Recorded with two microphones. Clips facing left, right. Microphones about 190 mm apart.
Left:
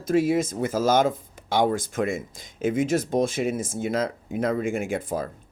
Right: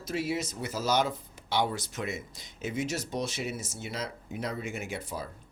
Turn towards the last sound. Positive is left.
turn(degrees=50)  # may be behind; listen again after turning